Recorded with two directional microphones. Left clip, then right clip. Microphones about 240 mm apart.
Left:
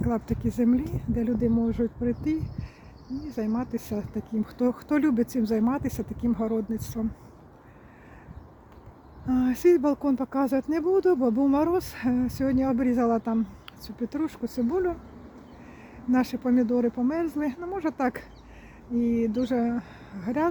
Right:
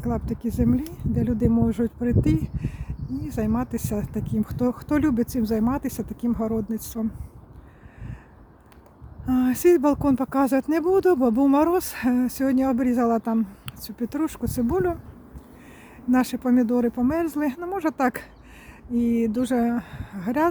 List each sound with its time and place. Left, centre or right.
0.0 s speech: centre
9.2 s speech: centre
16.1 s speech: right